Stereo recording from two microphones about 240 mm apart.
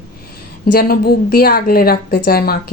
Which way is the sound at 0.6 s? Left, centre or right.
Left.